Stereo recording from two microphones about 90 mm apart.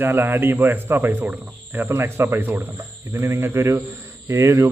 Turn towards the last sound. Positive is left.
turn(degrees=-30)  # may be behind; listen again after turning